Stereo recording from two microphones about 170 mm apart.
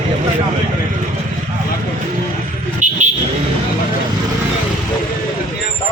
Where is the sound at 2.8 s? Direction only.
45° right (ahead or behind).